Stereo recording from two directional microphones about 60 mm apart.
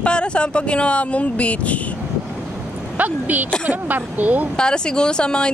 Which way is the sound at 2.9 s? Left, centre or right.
Right.